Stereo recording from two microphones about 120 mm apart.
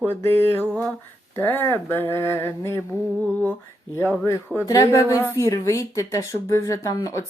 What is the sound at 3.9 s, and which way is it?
Speech, 20° left (ahead or behind).